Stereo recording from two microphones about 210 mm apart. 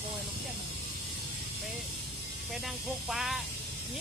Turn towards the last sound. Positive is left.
turn(degrees=0)  # may be behind; listen again after turning